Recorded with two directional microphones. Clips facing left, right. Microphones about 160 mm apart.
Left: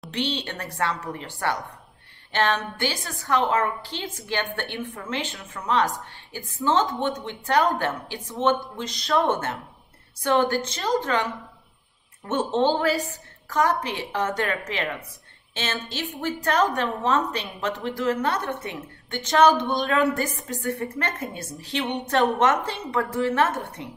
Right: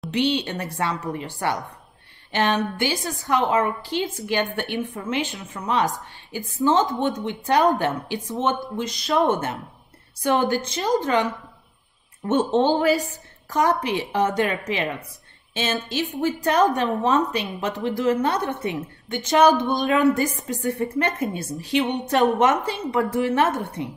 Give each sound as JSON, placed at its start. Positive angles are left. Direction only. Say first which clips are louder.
{"t": 0.1, "sound": "a woman's voice", "louder": "right 6 dB", "side_deg": -10}
{"t": 10.2, "sound": "a woman's voice", "louder": "right 1 dB", "side_deg": -10}
{"t": 12.3, "sound": "a woman's voice", "louder": "right 3 dB", "side_deg": -15}